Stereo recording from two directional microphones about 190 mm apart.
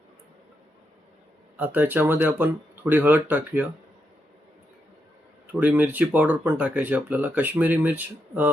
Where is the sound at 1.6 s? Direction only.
10° right (ahead or behind).